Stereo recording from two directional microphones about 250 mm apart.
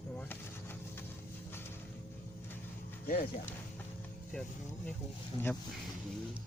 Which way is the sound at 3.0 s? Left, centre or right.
Left.